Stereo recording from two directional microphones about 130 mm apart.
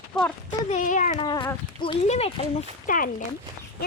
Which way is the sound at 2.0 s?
55° left (ahead or behind).